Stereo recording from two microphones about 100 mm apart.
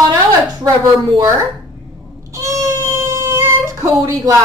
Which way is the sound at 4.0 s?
40° right (ahead or behind).